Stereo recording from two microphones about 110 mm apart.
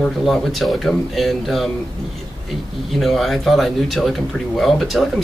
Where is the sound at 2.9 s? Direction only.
Centre (ahead or behind).